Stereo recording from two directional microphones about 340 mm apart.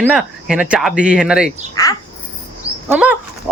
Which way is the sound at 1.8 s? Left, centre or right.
Centre.